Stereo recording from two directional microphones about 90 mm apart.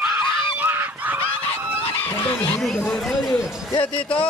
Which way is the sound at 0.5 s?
20° right (ahead or behind).